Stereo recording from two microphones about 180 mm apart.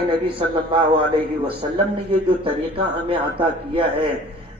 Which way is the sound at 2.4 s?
30° right (ahead or behind).